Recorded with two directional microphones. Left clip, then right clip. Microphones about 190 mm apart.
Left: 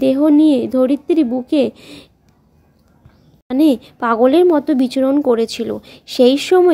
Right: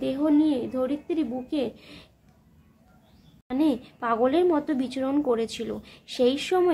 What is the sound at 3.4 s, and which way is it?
Speech, 40° left (ahead or behind).